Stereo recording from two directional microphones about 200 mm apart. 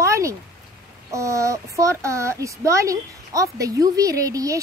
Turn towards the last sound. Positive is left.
turn(degrees=-15)  # may be behind; listen again after turning